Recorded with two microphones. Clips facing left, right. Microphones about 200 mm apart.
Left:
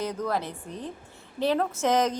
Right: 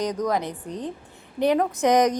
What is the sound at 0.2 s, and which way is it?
A woman's voice, 15° right (ahead or behind).